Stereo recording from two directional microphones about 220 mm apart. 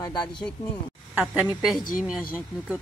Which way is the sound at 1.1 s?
5° right (ahead or behind).